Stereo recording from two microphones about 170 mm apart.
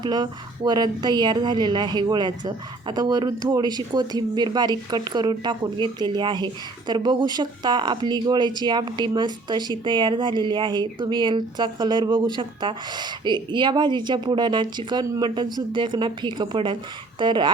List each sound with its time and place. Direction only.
0.0 s speech: 25° right (ahead or behind)